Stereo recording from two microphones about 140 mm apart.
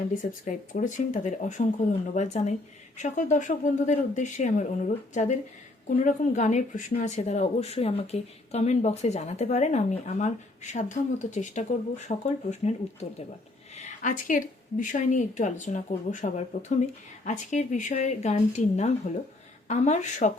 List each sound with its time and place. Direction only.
0.1 s a woman's voice: 70° left (ahead or behind)
7.2 s a woman's voice: 50° left (ahead or behind)